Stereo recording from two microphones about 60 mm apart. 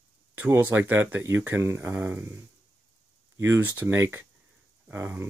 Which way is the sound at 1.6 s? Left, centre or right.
Right.